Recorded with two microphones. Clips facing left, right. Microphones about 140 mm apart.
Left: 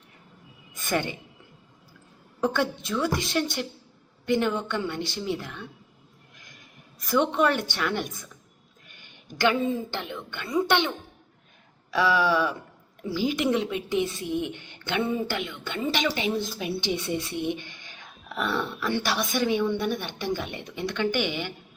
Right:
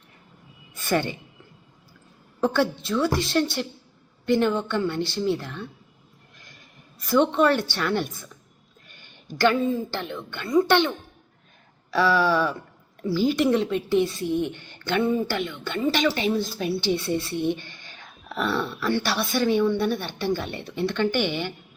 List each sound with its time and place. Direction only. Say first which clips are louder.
0.9 s a woman's voice: right 3 dB; 15° left (ahead or behind)
2.4 s a woman's voice: right 3 dB; 15° left (ahead or behind)
7.2 s a woman's voice: right 3 dB; 10° left (ahead or behind)
9.2 s a woman's voice: right 3 dB; 15° left (ahead or behind)